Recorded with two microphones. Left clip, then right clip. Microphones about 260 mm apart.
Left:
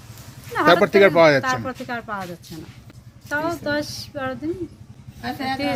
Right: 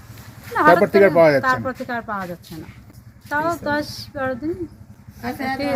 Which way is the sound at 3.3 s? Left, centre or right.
Centre.